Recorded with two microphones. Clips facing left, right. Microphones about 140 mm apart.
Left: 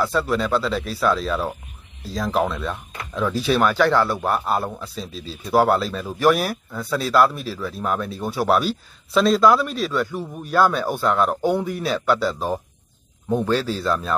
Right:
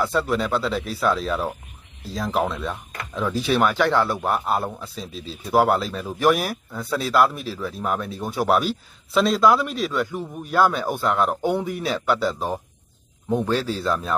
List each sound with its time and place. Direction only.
0.3 s a man's voice: 15° right (ahead or behind)
13.5 s a man's voice: 20° right (ahead or behind)